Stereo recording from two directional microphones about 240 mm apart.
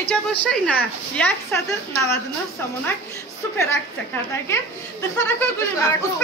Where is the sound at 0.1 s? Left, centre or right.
Centre.